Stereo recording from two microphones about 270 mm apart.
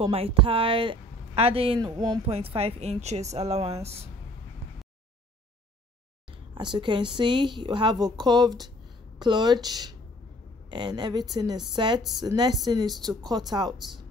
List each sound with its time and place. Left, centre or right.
0.0 s speech: right
6.5 s speech: centre